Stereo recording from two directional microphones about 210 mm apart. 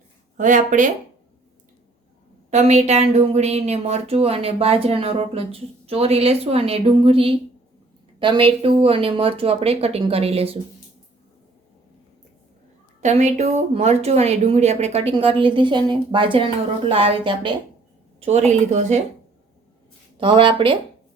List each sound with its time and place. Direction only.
0.3 s speech: 40° right (ahead or behind)
2.5 s speech: 35° right (ahead or behind)
13.0 s speech: 35° right (ahead or behind)
20.1 s speech: 25° right (ahead or behind)